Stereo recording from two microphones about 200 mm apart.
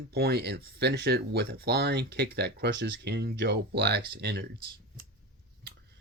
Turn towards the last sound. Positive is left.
turn(degrees=-55)  # may be behind; listen again after turning